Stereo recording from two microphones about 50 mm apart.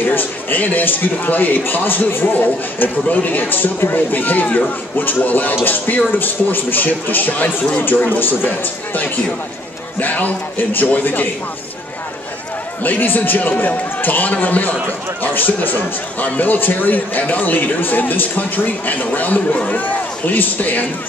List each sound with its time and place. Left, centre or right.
0.1 s a man's voice: left
12.8 s a man's voice: left